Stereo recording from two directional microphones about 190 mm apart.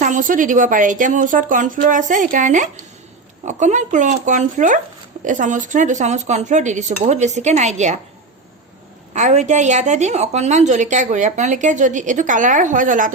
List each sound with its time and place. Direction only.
0.0 s a woman's voice: 45° right (ahead or behind)
9.1 s a woman's voice: 40° right (ahead or behind)